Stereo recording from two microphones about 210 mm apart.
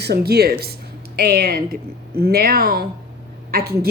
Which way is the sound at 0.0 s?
50° right (ahead or behind).